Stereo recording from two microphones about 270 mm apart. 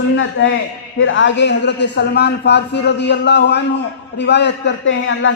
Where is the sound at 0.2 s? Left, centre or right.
Left.